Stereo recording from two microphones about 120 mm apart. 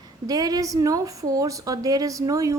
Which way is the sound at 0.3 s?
30° right (ahead or behind).